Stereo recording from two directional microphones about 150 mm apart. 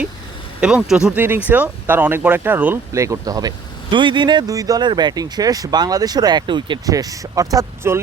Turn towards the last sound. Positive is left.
turn(degrees=-20)  # may be behind; listen again after turning